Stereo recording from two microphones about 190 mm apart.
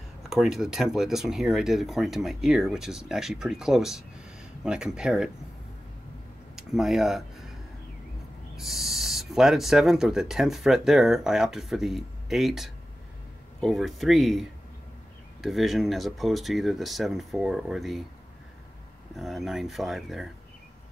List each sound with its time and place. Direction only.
0.2 s speech: centre (ahead or behind)
6.5 s a sound: centre (ahead or behind)
8.5 s speech: centre (ahead or behind)
19.1 s speech: centre (ahead or behind)